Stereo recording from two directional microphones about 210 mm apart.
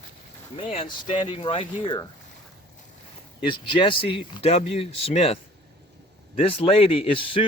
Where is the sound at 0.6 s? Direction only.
25° left (ahead or behind).